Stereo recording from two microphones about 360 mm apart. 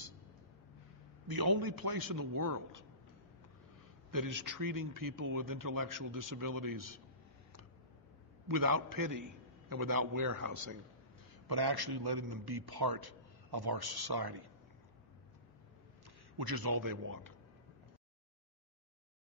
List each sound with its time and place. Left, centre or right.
1.2 s a man's voice: right
4.1 s a man's voice: right
8.5 s a man's voice: right
11.4 s a man's voice: right
16.3 s a man's voice: right